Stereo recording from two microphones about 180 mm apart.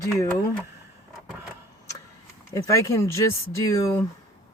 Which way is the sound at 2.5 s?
15° left (ahead or behind).